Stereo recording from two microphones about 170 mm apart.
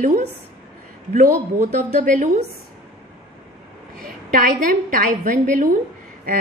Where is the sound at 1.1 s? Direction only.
50° right (ahead or behind).